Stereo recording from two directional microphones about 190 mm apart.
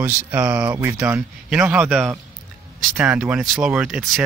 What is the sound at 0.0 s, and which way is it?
Speech, 10° right (ahead or behind).